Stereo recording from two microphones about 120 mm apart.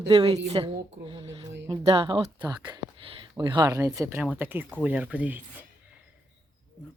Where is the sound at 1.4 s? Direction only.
30° right (ahead or behind).